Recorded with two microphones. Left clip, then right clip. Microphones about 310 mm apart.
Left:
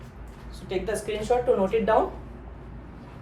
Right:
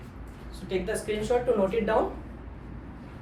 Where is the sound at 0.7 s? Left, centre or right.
Centre.